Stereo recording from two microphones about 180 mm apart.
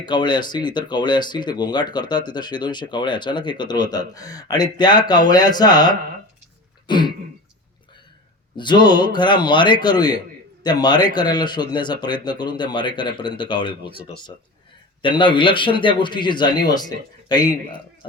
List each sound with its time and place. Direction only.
0.0 s speech: 25° left (ahead or behind)
6.8 s throat clearing: 25° left (ahead or behind)
8.5 s speech: 25° left (ahead or behind)
15.0 s speech: 25° left (ahead or behind)